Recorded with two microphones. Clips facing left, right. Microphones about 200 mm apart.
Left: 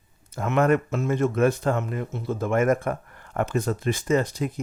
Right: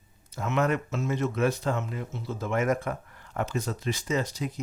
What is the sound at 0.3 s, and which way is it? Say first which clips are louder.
Speech: left 6 dB; 55° left (ahead or behind).